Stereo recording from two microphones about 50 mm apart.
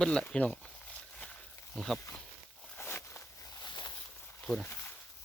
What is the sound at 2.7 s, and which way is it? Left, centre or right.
Walk, left.